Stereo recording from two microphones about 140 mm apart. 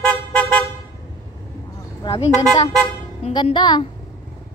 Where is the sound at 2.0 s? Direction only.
45° left (ahead or behind).